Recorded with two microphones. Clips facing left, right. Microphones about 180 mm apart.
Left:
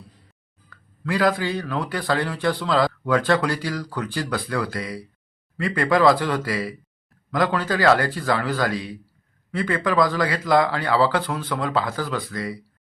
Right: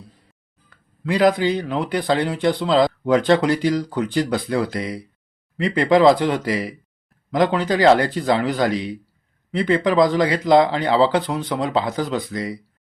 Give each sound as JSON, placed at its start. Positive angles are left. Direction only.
{"t": 0.7, "sound": "speech", "side_deg": -20}